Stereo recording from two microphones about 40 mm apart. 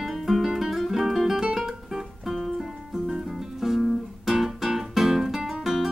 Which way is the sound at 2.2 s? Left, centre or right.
Centre.